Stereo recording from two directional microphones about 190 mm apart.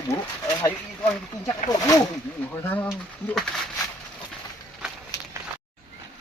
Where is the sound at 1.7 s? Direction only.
20° left (ahead or behind).